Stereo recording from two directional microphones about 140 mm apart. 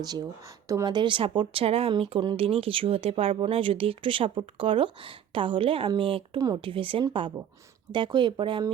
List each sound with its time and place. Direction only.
0.0 s speech: 30° right (ahead or behind)